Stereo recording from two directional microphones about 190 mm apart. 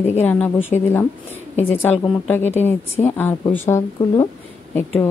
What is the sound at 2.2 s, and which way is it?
Speech, 10° left (ahead or behind).